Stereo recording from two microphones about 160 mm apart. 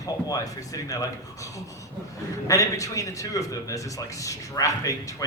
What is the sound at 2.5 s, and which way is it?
A man's voice, 20° left (ahead or behind).